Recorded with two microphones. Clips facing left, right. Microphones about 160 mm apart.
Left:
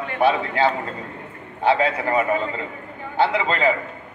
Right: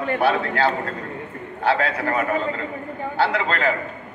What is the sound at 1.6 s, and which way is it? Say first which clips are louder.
A man's voice: left 2 dB; 20° left (ahead or behind).